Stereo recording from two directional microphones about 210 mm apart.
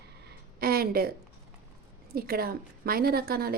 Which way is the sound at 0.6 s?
45° right (ahead or behind).